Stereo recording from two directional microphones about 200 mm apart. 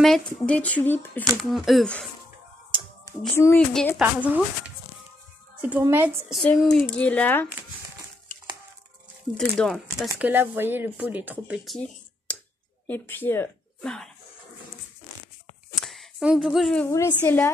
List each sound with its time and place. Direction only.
0.0 s speech: 5° left (ahead or behind)
2.7 s a sound: 25° right (ahead or behind)
3.3 s speech: 10° left (ahead or behind)
4.0 s speech: 5° right (ahead or behind)
9.4 s speech: 5° left (ahead or behind)
10.1 s speech: 10° right (ahead or behind)
12.3 s a sound: 5° left (ahead or behind)
12.8 s a woman's voice: 10° left (ahead or behind)
15.7 s a sound: centre (ahead or behind)
16.8 s speech: 10° left (ahead or behind)